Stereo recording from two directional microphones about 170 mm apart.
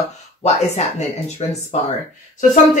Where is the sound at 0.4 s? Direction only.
40° left (ahead or behind).